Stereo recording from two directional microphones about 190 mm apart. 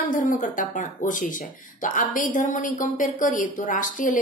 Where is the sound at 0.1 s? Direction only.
45° left (ahead or behind).